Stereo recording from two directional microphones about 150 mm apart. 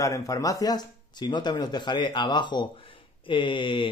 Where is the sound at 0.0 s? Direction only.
25° left (ahead or behind).